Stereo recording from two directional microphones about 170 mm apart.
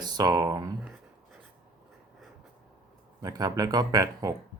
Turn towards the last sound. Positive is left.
turn(degrees=-20)  # may be behind; listen again after turning